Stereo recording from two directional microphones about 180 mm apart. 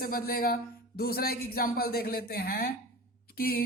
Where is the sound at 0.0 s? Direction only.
55° left (ahead or behind).